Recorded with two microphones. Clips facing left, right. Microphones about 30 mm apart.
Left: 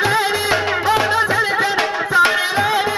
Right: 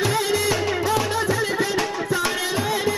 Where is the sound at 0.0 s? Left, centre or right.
Left.